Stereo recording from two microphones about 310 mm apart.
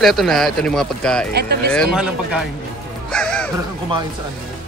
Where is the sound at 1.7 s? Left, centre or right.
Centre.